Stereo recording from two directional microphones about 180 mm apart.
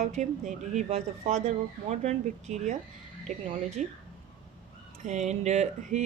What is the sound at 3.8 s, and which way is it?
Speech, 40° right (ahead or behind).